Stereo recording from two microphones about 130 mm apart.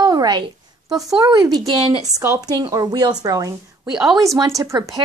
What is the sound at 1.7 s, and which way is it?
Speech, 45° right (ahead or behind).